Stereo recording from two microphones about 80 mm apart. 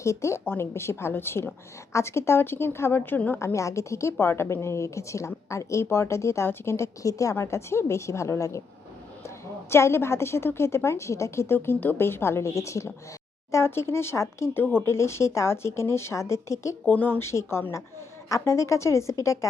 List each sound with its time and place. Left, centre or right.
0.0 s a woman's voice: left
3.3 s a woman's voice: left
16.8 s a woman's voice: left